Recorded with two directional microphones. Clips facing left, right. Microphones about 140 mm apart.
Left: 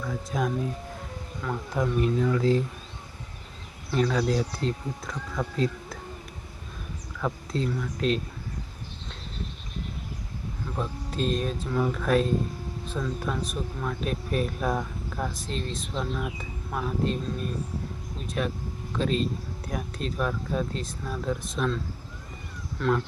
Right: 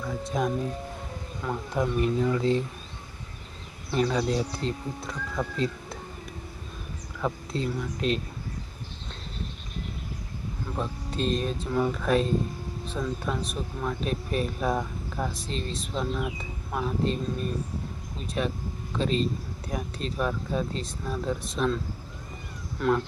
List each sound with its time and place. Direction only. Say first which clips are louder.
0.0 s speech: right 1 dB; centre (ahead or behind)
1.7 s speech: even; centre (ahead or behind)
3.9 s speech: left 1 dB; 5° right (ahead or behind)
7.2 s speech: even; 5° right (ahead or behind)
10.8 s speech: left 1 dB; centre (ahead or behind)
22.8 s speech: right 1 dB; 5° right (ahead or behind)